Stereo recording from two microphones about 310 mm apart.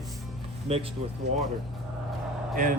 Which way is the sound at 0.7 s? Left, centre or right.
Centre.